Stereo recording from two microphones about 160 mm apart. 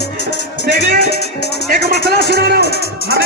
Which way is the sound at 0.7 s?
90° left.